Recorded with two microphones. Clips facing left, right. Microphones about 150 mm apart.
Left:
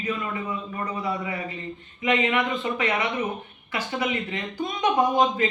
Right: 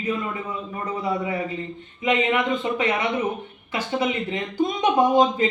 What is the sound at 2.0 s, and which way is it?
Speech, 25° right (ahead or behind).